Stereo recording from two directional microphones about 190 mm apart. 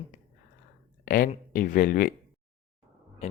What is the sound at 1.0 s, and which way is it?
Speech, 50° left (ahead or behind).